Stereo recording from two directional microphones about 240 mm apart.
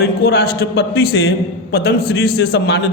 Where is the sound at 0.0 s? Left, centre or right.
Left.